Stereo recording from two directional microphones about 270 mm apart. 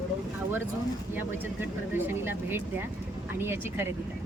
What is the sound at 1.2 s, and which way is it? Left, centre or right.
Speech, centre.